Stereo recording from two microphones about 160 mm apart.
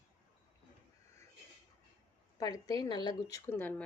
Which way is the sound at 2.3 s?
20° left (ahead or behind).